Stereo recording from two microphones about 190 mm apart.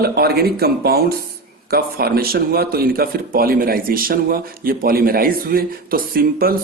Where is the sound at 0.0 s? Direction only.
55° right (ahead or behind).